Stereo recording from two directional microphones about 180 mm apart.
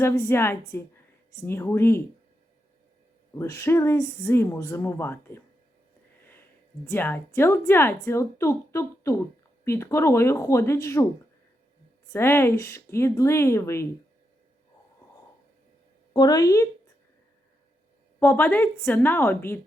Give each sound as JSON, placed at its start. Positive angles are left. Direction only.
{"t": 0.0, "sound": "speech", "side_deg": 15}
{"t": 3.3, "sound": "speech", "side_deg": 15}
{"t": 6.9, "sound": "speech", "side_deg": 10}
{"t": 12.1, "sound": "speech", "side_deg": 15}
{"t": 16.1, "sound": "a woman's voice", "side_deg": 20}
{"t": 18.2, "sound": "speech", "side_deg": 10}